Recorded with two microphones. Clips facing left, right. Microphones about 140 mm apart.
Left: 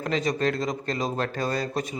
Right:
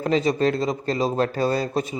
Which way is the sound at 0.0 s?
30° right (ahead or behind).